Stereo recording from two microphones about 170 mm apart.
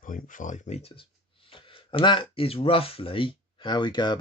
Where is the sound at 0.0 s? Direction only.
50° left (ahead or behind).